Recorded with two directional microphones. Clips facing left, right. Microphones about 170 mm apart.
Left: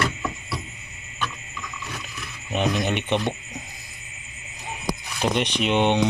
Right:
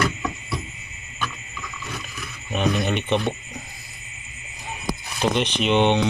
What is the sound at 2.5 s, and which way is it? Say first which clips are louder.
Speech: right 1 dB; 15° left (ahead or behind).